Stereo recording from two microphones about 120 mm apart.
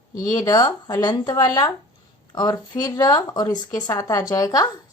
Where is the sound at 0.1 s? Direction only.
30° left (ahead or behind).